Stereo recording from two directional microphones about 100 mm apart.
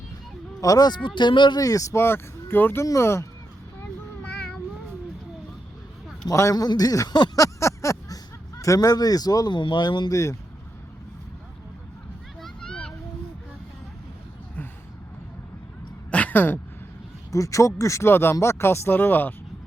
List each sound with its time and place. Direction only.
0.6 s speech: 40° left (ahead or behind)
1.6 s speech: 35° left (ahead or behind)
4.2 s meow: 15° left (ahead or behind)
6.2 s a man's voice: 35° left (ahead or behind)
7.3 s a sound: 35° left (ahead or behind)
9.6 s speech: 50° left (ahead or behind)
10.1 s a man's voice: 30° left (ahead or behind)
12.4 s a sound: 5° left (ahead or behind)
16.1 s a sound: 15° left (ahead or behind)
17.3 s speech: 30° left (ahead or behind)